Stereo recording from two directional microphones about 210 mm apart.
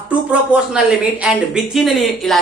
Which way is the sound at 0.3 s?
5° right (ahead or behind).